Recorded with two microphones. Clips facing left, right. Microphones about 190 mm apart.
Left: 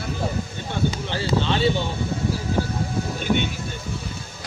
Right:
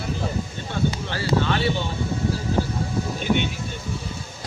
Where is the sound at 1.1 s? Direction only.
20° left (ahead or behind).